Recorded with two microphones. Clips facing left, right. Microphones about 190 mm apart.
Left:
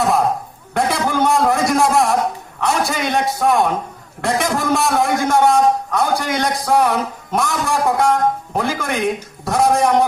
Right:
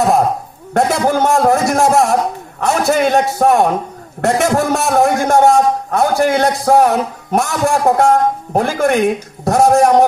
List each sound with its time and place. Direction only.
0.7 s a man's voice: 45° right (ahead or behind)